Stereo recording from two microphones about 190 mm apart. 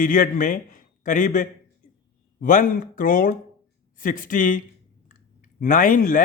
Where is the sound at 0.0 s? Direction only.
45° left (ahead or behind).